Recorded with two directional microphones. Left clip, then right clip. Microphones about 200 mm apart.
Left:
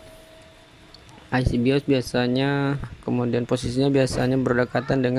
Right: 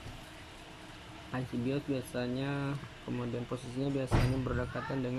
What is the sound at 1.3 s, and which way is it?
Speech, 50° left (ahead or behind).